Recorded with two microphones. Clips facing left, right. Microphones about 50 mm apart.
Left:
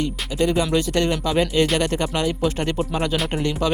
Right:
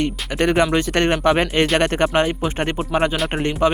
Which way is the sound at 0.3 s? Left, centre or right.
Right.